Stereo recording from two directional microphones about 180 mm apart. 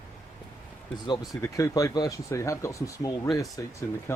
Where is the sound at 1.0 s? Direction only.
25° left (ahead or behind).